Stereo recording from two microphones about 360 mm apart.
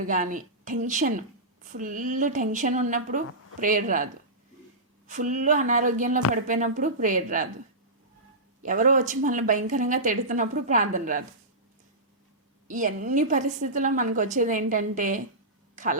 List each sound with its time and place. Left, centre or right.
0.0 s a woman's voice: right
8.6 s a woman's voice: right
12.6 s a woman's voice: right